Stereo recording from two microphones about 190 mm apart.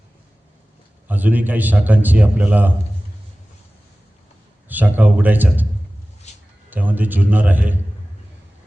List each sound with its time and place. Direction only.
1.0 s a man's voice: 10° right (ahead or behind)
4.7 s a man's voice: 10° right (ahead or behind)
6.3 s a sound: 35° left (ahead or behind)
6.7 s a man's voice: 10° right (ahead or behind)